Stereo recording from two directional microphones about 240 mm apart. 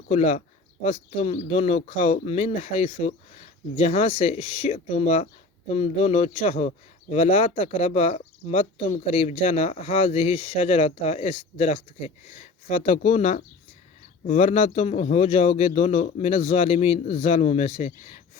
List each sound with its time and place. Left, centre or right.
0.1 s speech: left